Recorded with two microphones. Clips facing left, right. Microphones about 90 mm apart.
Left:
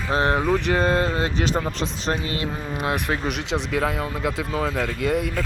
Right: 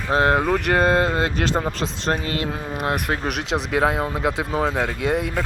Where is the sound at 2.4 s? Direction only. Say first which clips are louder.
Right 1 dB; 50° right (ahead or behind).